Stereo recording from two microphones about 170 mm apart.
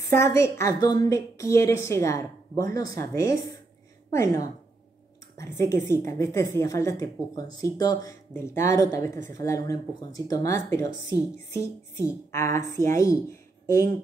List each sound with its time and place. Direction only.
0.1 s a woman's voice: 15° left (ahead or behind)